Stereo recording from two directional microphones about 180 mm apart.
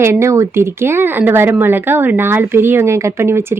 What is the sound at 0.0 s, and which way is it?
Speech, 15° right (ahead or behind).